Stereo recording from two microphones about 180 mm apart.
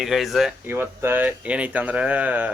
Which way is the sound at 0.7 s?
10° right (ahead or behind).